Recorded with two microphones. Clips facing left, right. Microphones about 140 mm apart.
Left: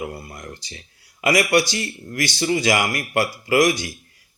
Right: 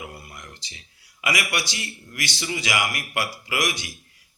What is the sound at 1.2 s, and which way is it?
Speech, 40° left (ahead or behind).